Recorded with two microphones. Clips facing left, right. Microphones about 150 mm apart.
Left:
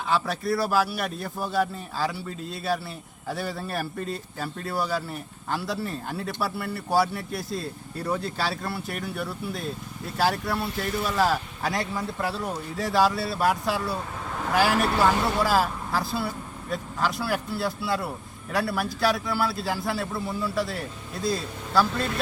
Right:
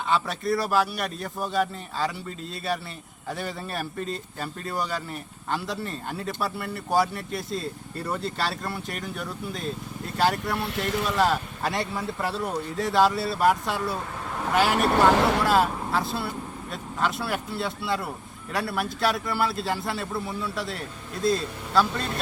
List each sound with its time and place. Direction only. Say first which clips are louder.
0.1 s a man's voice: even; centre (ahead or behind)
15.2 s speech: right 2 dB; 80° right
15.4 s a man's voice: right 2 dB; centre (ahead or behind)